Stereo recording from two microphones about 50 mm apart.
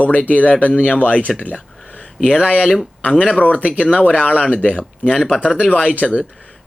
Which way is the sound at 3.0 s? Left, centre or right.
Left.